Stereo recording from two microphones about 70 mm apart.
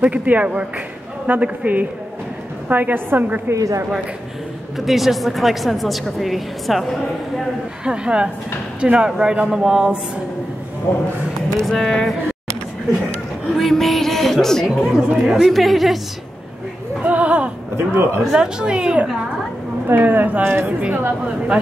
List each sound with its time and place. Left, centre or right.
0.0 s a woman's voice: right
3.5 s a woman's voice: right
4.7 s a woman's voice: centre
7.8 s speech: centre
10.9 s speech: left
11.6 s speech: centre
13.6 s a woman's voice: centre
14.9 s speech: centre
15.4 s a woman's voice: centre
17.0 s a sound: right
17.7 s a man's voice: right
18.3 s speech: centre
19.9 s a woman's voice: right